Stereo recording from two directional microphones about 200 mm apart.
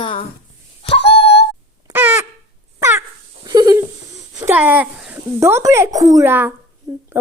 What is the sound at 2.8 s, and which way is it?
Dog, 15° right (ahead or behind).